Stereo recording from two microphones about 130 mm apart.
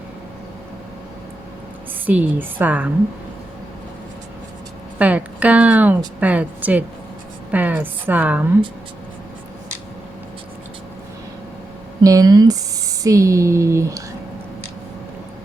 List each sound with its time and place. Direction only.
2.0 s a woman's voice: 15° right (ahead or behind)
4.9 s a woman's voice: 10° right (ahead or behind)
12.0 s speech: 25° right (ahead or behind)